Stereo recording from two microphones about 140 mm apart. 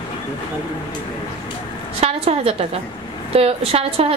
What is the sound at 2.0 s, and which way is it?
A woman's voice, 45° right (ahead or behind).